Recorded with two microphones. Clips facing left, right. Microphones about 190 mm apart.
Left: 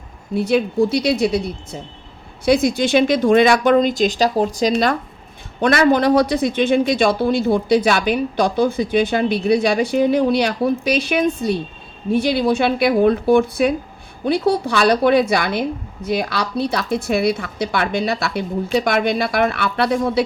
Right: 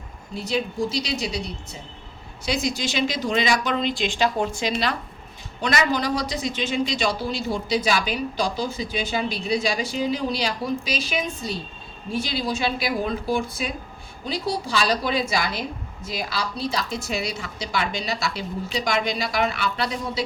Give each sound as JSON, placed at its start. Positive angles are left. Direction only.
{"t": 0.3, "sound": "a man's voice", "side_deg": 60}
{"t": 5.5, "sound": "a man's voice", "side_deg": 55}